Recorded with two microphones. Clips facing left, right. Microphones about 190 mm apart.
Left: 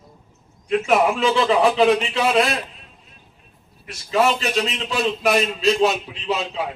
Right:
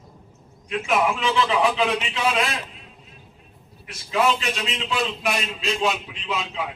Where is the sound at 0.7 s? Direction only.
40° left (ahead or behind).